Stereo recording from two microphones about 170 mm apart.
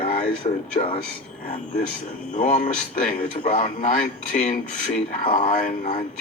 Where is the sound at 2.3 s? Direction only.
45° left (ahead or behind).